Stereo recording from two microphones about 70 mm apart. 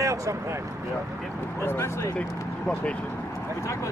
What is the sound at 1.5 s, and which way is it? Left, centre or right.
Speech, left.